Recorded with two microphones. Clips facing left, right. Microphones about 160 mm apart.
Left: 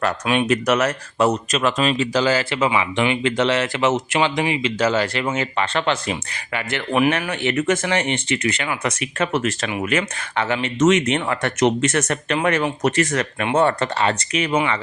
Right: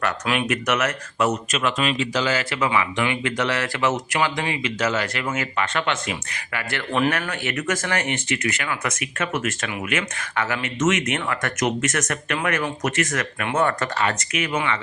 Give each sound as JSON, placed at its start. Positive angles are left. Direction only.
{"t": 0.0, "sound": "speech", "side_deg": 30}